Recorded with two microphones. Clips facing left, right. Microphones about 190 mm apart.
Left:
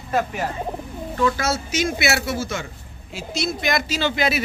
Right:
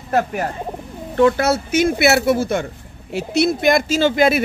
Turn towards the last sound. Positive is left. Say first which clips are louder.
# right 7 dB
turn(degrees=-50)  # may be behind; listen again after turning